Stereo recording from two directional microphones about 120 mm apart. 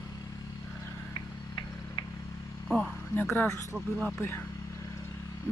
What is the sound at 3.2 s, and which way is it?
Speech, 15° left (ahead or behind).